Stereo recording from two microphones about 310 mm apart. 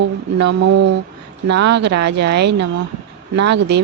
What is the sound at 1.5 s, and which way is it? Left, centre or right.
Speech, right.